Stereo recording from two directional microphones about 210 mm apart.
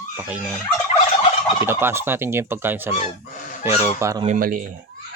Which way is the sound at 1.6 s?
10° right (ahead or behind).